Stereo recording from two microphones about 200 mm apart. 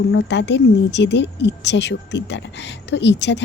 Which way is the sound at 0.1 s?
60° left (ahead or behind).